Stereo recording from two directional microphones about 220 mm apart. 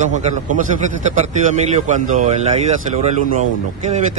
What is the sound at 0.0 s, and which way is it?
A man's voice, 35° right (ahead or behind).